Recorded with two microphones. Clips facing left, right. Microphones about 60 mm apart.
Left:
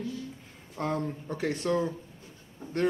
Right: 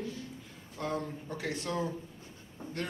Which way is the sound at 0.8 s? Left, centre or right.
Left.